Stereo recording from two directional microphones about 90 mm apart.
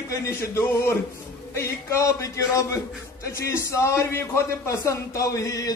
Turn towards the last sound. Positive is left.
turn(degrees=40)  # may be behind; listen again after turning